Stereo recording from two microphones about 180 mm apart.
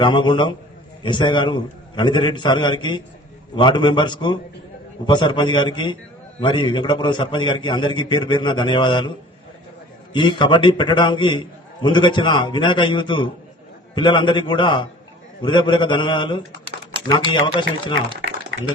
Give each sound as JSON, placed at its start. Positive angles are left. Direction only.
{"t": 0.0, "sound": "a man's voice", "side_deg": 25}